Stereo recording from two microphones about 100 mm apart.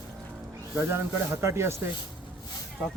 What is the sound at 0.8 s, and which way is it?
Speech, 25° right (ahead or behind).